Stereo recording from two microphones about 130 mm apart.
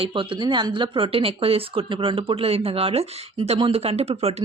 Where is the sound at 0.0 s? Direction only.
40° right (ahead or behind).